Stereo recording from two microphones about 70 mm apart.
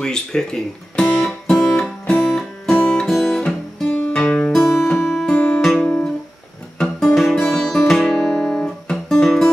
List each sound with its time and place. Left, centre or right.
0.0 s guitar: centre
3.9 s music: centre
7.3 s guitar: centre
8.9 s music: centre